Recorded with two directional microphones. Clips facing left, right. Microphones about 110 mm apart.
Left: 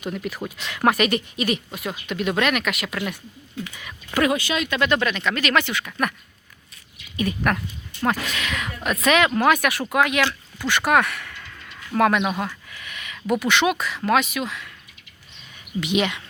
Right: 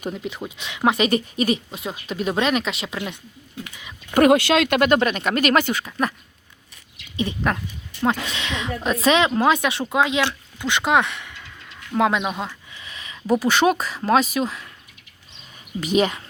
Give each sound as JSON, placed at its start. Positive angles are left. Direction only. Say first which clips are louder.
{"t": 0.1, "sound": "speech", "louder": "left 1 dB", "side_deg": -20}
{"t": 4.1, "sound": "speech", "louder": "right 7 dB", "side_deg": -55}
{"t": 4.8, "sound": "speech", "louder": "right 3 dB", "side_deg": -40}
{"t": 5.8, "sound": "speech", "louder": "right 1 dB", "side_deg": -30}
{"t": 7.2, "sound": "speech", "louder": "even", "side_deg": -25}
{"t": 12.4, "sound": "a sound", "louder": "left 2 dB", "side_deg": -20}
{"t": 13.4, "sound": "speech", "louder": "right 2 dB", "side_deg": -35}
{"t": 15.8, "sound": "speech", "louder": "right 3 dB", "side_deg": -40}